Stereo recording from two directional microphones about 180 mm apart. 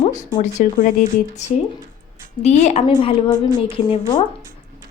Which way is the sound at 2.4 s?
40° left (ahead or behind).